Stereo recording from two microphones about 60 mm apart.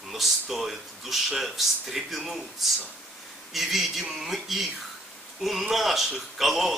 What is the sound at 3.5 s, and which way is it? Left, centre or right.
Speech, centre.